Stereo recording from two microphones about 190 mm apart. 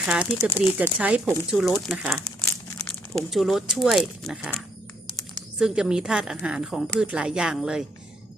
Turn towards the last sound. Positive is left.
turn(degrees=-5)  # may be behind; listen again after turning